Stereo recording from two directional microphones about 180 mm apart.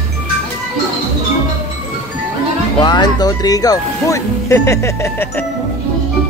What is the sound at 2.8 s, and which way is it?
Speech, 25° left (ahead or behind).